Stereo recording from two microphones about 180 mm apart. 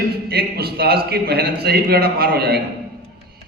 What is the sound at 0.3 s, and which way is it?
A man's voice, 60° right (ahead or behind).